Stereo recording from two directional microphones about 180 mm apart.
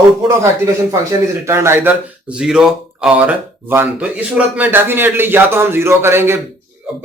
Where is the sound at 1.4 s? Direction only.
15° right (ahead or behind).